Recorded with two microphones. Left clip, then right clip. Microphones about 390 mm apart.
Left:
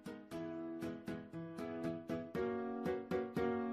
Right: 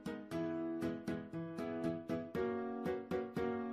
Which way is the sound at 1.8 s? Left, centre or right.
Centre.